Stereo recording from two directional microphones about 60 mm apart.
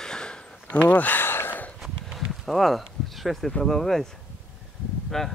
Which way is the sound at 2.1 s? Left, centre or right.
Centre.